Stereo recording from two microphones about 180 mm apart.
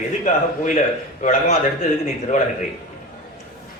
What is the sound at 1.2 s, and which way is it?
A man's voice, 45° left (ahead or behind).